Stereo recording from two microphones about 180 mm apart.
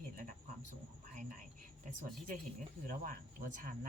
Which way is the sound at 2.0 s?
50° right (ahead or behind).